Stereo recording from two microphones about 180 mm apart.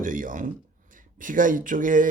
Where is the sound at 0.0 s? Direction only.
45° right (ahead or behind).